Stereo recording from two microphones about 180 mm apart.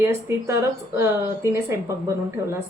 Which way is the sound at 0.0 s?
15° right (ahead or behind).